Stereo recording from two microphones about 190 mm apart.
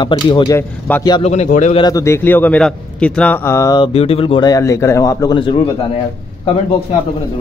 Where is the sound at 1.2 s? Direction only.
35° left (ahead or behind).